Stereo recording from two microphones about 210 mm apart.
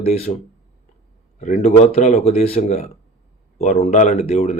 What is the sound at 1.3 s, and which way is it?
Speech, 35° left (ahead or behind).